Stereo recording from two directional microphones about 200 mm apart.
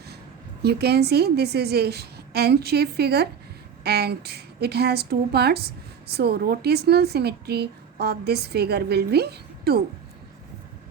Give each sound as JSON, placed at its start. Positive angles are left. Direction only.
{"t": 0.6, "sound": "speech", "side_deg": -55}